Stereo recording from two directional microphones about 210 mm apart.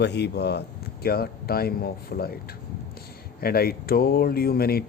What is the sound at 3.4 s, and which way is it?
Speech, 45° left (ahead or behind).